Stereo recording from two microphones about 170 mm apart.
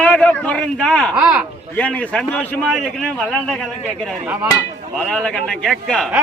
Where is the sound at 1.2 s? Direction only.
5° right (ahead or behind).